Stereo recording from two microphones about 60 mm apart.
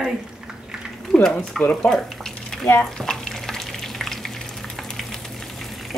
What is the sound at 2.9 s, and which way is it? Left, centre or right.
Water, centre.